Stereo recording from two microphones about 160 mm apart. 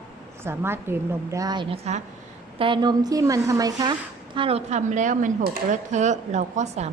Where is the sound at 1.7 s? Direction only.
40° right (ahead or behind).